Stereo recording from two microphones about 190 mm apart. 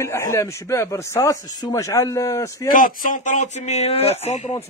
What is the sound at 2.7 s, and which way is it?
Speech, 45° left (ahead or behind).